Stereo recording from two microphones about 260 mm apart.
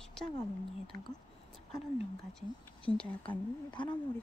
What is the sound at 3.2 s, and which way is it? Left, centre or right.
Speech, centre.